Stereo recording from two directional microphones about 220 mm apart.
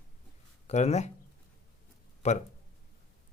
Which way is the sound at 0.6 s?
30° left (ahead or behind).